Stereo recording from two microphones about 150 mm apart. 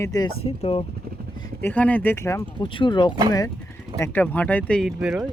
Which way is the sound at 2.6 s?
30° left (ahead or behind).